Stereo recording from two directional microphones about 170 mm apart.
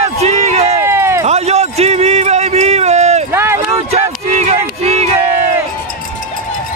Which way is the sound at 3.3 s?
15° right (ahead or behind).